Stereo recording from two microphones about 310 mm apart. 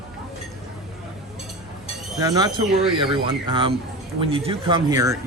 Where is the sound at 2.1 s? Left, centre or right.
Centre.